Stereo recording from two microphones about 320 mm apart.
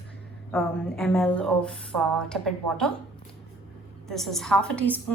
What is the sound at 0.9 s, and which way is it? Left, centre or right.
Speech, centre.